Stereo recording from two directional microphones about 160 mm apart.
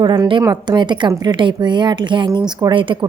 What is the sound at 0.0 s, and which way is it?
A woman's voice, 25° right (ahead or behind).